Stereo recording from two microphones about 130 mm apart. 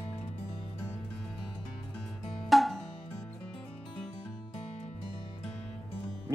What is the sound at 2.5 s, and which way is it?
Music, centre (ahead or behind).